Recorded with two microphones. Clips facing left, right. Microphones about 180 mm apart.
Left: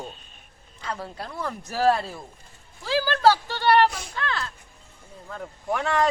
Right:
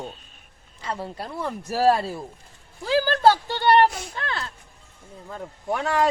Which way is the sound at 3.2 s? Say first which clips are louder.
Even; 20° right (ahead or behind).